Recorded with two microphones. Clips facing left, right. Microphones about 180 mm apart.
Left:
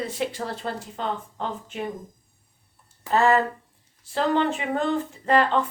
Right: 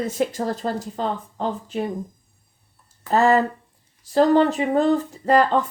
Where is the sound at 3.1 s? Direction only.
40° right (ahead or behind).